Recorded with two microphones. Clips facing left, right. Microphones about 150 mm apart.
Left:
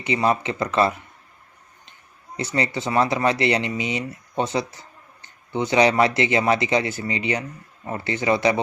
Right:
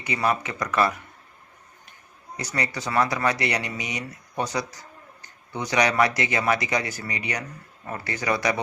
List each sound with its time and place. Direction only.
0.0 s speech: 25° left (ahead or behind)
2.3 s speech: 25° left (ahead or behind)